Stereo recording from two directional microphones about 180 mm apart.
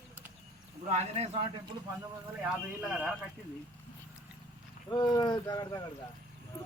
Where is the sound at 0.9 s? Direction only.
40° right (ahead or behind).